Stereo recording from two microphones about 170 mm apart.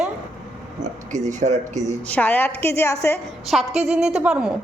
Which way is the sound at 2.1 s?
10° left (ahead or behind).